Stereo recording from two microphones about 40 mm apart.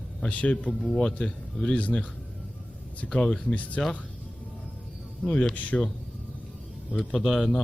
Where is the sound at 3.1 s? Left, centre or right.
Left.